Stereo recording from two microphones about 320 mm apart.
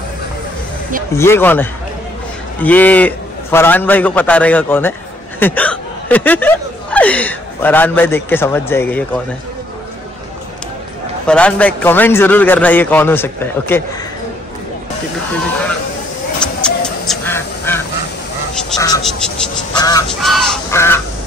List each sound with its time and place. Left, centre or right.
1.1 s a man's voice: centre
11.2 s a man's voice: centre
16.3 s goose: centre
18.5 s a sound: centre
20.2 s crow: centre